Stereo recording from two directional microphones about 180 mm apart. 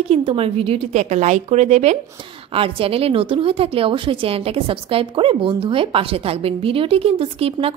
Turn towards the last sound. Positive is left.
turn(degrees=-30)  # may be behind; listen again after turning